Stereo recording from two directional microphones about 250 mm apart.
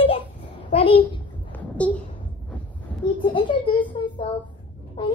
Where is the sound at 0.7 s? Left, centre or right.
Left.